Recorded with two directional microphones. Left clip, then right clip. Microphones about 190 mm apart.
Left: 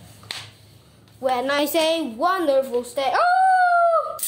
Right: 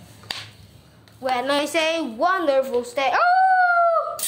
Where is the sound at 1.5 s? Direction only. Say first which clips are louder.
Left 1 dB; 25° left (ahead or behind).